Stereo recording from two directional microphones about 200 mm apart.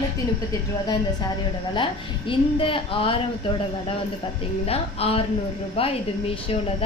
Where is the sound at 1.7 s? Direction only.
25° left (ahead or behind).